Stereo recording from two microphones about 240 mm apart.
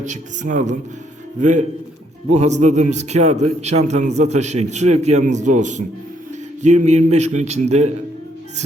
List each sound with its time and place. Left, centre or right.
0.0 s a man's voice: right